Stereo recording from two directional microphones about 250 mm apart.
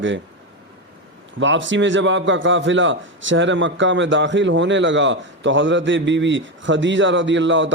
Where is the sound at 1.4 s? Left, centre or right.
Right.